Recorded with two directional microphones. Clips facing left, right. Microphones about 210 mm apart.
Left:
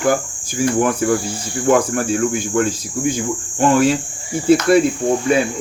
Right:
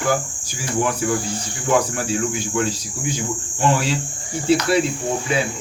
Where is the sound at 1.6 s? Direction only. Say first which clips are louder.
Left 5 dB; 50° left (ahead or behind).